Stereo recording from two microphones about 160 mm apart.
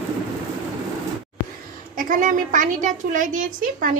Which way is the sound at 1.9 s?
55° right (ahead or behind).